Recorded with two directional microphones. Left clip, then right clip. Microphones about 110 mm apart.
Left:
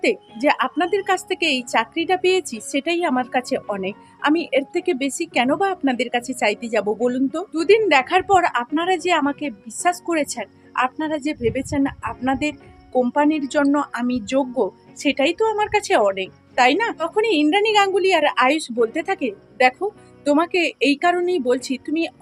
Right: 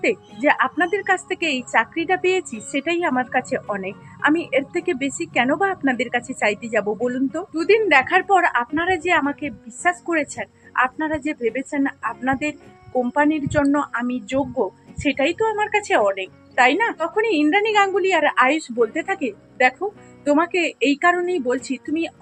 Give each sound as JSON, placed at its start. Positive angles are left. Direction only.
{"t": 0.4, "sound": "a woman's voice", "side_deg": 35}
{"t": 7.0, "sound": "a woman's voice", "side_deg": 25}
{"t": 16.9, "sound": "a woman's voice", "side_deg": 30}